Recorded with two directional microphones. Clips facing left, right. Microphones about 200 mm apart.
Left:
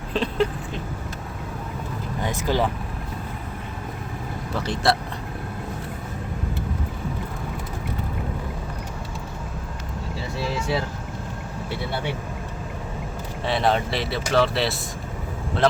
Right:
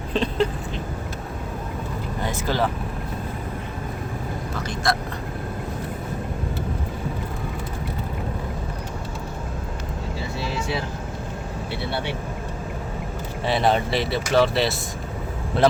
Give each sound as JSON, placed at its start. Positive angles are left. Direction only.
{"t": 0.1, "sound": "vehicle", "side_deg": 5}
{"t": 2.2, "sound": "vehicle", "side_deg": 15}
{"t": 4.6, "sound": "speech", "side_deg": 30}
{"t": 13.4, "sound": "speech", "side_deg": 0}